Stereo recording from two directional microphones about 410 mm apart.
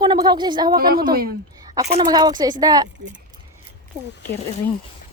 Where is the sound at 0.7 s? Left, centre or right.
Right.